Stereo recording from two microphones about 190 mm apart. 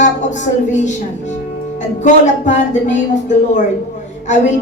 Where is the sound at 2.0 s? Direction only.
40° left (ahead or behind).